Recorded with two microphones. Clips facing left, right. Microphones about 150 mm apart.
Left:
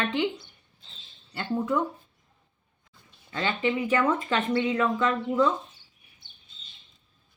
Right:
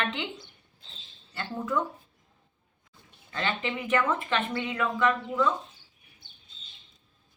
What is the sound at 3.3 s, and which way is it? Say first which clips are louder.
Speech: left 4 dB; 25° left (ahead or behind).